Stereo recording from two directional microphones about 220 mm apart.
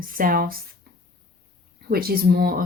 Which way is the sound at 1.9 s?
45° right (ahead or behind).